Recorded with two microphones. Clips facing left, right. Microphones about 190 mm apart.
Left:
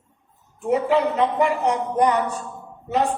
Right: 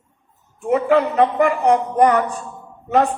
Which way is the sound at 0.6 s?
55° right (ahead or behind).